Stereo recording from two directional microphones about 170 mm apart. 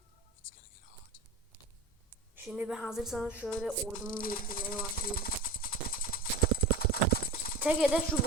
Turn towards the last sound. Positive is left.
turn(degrees=-5)  # may be behind; listen again after turning